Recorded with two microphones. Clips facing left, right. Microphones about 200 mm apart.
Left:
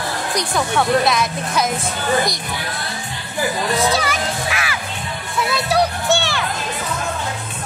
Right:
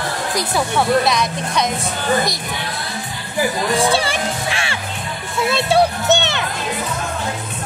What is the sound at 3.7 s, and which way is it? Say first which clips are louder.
Music: right 2 dB; 30° right (ahead or behind).